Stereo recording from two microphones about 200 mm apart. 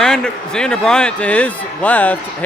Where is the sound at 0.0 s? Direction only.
5° left (ahead or behind).